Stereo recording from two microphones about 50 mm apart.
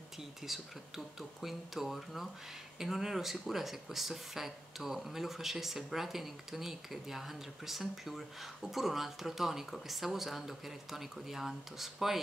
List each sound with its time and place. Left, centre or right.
0.2 s speech: centre